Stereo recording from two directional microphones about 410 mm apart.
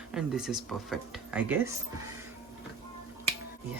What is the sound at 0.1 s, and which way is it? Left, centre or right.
Speech, centre.